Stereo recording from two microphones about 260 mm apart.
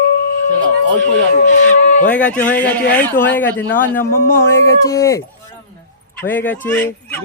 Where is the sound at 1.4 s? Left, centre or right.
Left.